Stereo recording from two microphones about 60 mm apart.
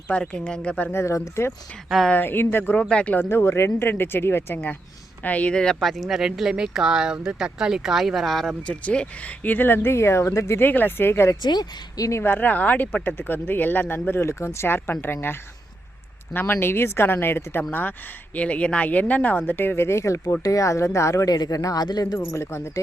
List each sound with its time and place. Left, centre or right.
0.1 s speech: centre
0.9 s speech: left
2.1 s speech: left
2.9 s speech: left
3.2 s speech: left; by 5.7 s centre
5.8 s speech: centre
8.6 s speech: centre
9.4 s speech: left
10.6 s speech: left
14.1 s speech: left
18.3 s speech: left
20.4 s speech: left
22.3 s speech: left